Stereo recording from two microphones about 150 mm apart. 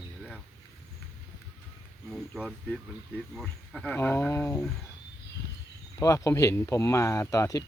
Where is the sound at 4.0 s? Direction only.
15° left (ahead or behind).